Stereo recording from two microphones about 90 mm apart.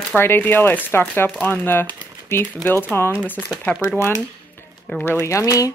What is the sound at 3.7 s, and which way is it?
Speech, 15° left (ahead or behind).